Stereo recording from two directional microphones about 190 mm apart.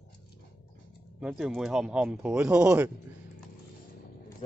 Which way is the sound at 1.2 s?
5° right (ahead or behind).